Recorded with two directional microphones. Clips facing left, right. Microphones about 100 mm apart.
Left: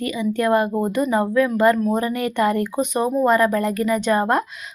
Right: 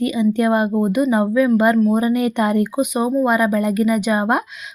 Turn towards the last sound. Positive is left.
turn(degrees=-15)  # may be behind; listen again after turning